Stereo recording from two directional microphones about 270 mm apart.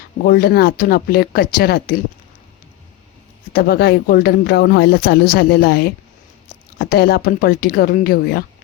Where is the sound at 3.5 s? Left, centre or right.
Left.